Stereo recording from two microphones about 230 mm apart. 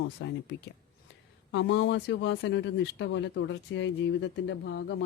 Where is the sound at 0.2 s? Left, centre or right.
Left.